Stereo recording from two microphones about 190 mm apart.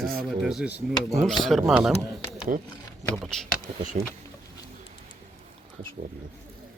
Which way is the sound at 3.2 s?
Centre (ahead or behind).